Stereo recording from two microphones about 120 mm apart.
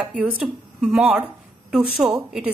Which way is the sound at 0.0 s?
10° right (ahead or behind).